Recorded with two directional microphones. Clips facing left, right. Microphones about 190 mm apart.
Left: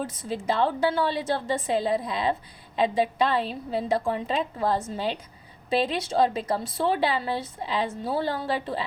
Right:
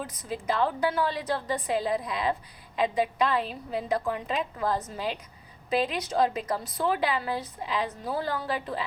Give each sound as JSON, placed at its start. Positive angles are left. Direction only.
{"t": 0.0, "sound": "a woman's voice", "side_deg": 30}